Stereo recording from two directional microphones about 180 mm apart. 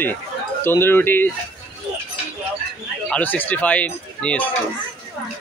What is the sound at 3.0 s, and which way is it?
Speech, 10° left (ahead or behind).